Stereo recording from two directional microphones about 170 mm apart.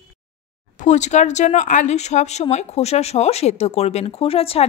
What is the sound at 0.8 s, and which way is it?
Speech, 45° left (ahead or behind).